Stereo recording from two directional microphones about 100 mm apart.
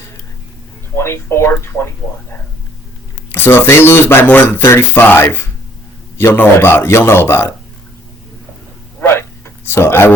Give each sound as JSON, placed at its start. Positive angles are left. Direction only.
{"t": 0.9, "sound": "speech", "side_deg": 25}
{"t": 3.3, "sound": "speech", "side_deg": 20}
{"t": 9.0, "sound": "a sound", "side_deg": 25}
{"t": 9.6, "sound": "speech", "side_deg": 25}